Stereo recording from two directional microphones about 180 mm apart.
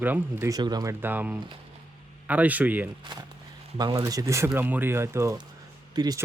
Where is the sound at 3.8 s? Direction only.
25° right (ahead or behind).